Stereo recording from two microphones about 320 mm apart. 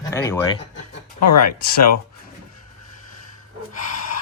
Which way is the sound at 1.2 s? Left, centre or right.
Left.